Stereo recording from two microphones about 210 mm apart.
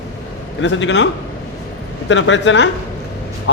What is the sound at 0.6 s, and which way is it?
A man's voice, 60° left (ahead or behind).